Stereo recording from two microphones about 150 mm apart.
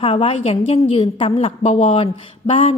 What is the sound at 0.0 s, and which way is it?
A woman's voice, 40° left (ahead or behind).